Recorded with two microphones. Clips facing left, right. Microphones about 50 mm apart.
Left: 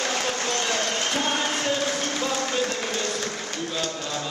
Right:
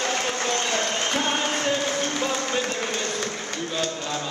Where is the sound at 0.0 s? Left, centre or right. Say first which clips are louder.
Right 1 dB; right.